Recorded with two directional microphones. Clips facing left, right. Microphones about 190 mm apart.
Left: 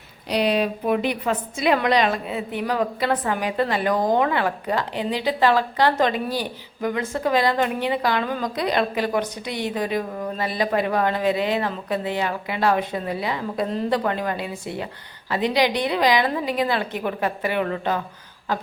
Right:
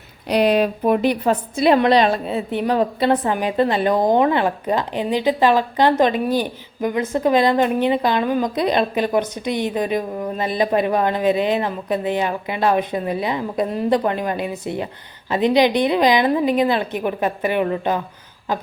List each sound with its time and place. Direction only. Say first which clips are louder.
0.3 s a woman's voice: right 5 dB; 50° right (ahead or behind); by 18.0 s 20° right (ahead or behind)